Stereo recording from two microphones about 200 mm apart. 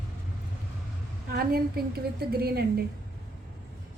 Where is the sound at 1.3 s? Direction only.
50° right (ahead or behind).